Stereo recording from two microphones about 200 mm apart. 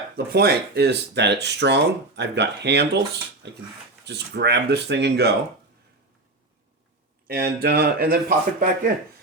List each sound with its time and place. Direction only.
0.3 s speech: 55° right (ahead or behind)
4.0 s speech: 60° right (ahead or behind)
7.3 s a man's voice: 50° right (ahead or behind)